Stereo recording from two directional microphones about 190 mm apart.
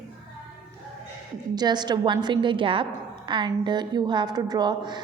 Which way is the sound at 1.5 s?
20° right (ahead or behind).